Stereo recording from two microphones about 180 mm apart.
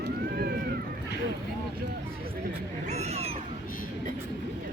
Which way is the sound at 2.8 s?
40° right (ahead or behind).